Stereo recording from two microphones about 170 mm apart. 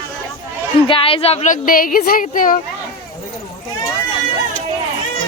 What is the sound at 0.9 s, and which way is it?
Speech, 35° left (ahead or behind).